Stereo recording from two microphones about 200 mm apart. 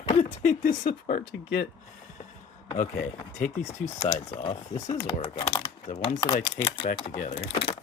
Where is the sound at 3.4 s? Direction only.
40° left (ahead or behind).